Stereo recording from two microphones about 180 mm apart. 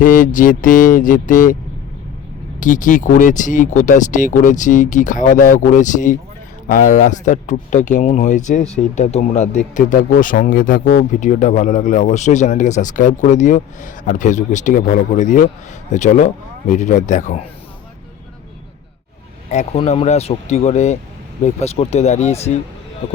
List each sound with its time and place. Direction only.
0.0 s speech: 45° left (ahead or behind)
2.6 s speech: 45° left (ahead or behind)
19.5 s speech: 40° left (ahead or behind)